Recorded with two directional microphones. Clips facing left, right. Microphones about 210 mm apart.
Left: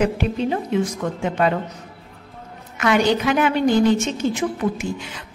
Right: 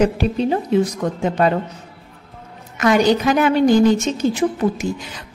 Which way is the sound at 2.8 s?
40° right (ahead or behind).